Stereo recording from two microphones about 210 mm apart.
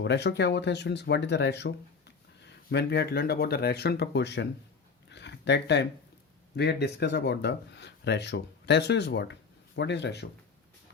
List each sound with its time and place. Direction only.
0.0 s speech: 55° left (ahead or behind)
5.0 s a sound: 55° left (ahead or behind)
6.6 s speech: 50° left (ahead or behind)